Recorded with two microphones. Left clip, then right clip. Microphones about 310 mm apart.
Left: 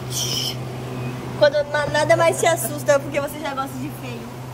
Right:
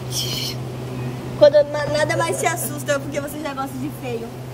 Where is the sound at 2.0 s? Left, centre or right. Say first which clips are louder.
Left 5 dB; centre.